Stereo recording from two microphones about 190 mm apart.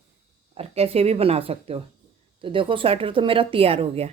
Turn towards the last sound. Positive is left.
turn(degrees=-30)  # may be behind; listen again after turning